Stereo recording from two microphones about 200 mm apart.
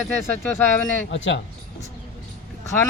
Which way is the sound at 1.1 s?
70° left (ahead or behind).